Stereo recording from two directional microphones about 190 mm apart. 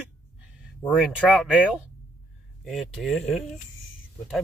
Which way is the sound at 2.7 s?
Centre (ahead or behind).